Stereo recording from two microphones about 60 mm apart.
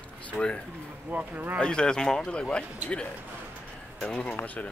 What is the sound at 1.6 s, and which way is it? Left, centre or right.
Speech, centre.